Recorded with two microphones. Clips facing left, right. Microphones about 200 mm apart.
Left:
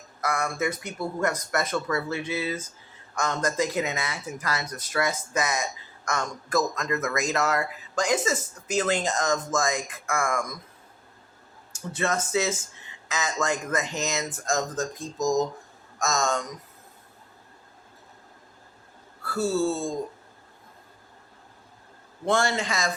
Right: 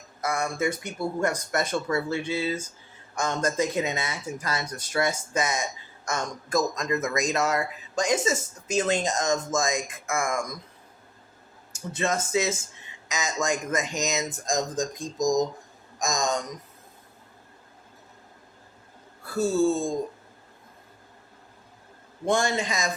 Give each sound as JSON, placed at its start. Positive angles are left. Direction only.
{"t": 0.2, "sound": "speech", "side_deg": -25}
{"t": 11.9, "sound": "speech", "side_deg": -20}
{"t": 19.2, "sound": "speech", "side_deg": -15}
{"t": 22.3, "sound": "speech", "side_deg": -15}